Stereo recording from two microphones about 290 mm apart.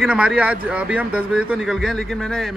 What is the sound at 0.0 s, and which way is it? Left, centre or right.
Speech, centre.